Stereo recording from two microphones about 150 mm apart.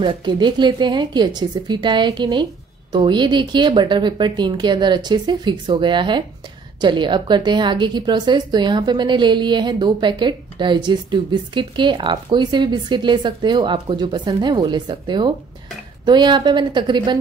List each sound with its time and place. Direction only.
0.0 s a woman's voice: 30° right (ahead or behind)